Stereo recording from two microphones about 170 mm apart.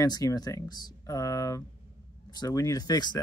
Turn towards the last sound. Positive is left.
turn(degrees=25)  # may be behind; listen again after turning